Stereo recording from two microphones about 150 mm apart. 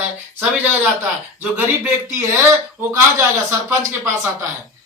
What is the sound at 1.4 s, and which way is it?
Speech, 15° right (ahead or behind).